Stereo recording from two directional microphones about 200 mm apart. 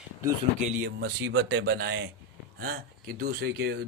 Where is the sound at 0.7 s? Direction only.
45° right (ahead or behind).